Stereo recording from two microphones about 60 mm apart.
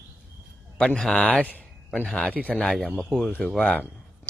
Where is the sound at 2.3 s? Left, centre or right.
Right.